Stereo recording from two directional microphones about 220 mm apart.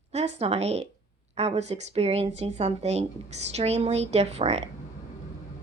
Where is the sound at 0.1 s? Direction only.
30° right (ahead or behind).